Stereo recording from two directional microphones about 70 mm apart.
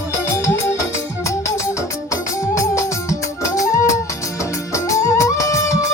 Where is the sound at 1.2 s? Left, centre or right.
Left.